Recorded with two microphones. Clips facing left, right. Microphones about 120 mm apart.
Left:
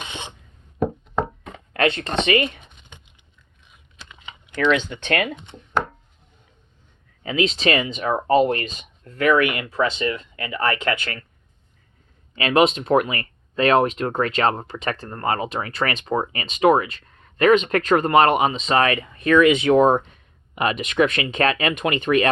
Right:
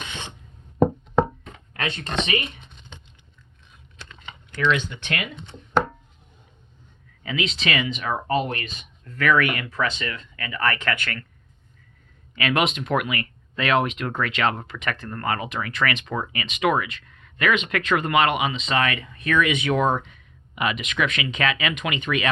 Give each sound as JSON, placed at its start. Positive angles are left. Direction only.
{"t": 0.0, "sound": "filing", "side_deg": 25}
{"t": 1.7, "sound": "speech", "side_deg": 55}
{"t": 4.1, "sound": "typing", "side_deg": 10}
{"t": 7.2, "sound": "speech", "side_deg": 40}
{"t": 9.1, "sound": "speech", "side_deg": 25}
{"t": 12.4, "sound": "speech", "side_deg": 30}